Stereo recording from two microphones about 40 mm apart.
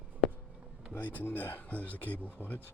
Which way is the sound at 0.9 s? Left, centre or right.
Left.